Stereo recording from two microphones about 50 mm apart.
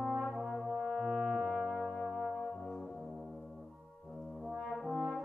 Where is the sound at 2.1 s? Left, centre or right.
Centre.